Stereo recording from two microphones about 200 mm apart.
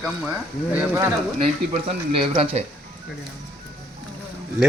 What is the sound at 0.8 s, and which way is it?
Speech, 10° right (ahead or behind).